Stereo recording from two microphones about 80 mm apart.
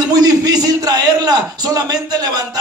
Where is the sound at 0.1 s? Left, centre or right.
Right.